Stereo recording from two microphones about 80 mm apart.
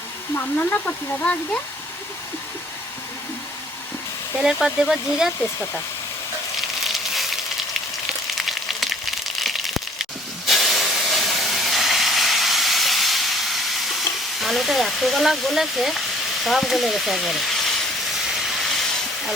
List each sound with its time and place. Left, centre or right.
0.3 s speech: centre
4.4 s speech: centre
6.6 s a sound: centre
8.4 s a sound: centre
14.4 s speech: centre
18.4 s train: centre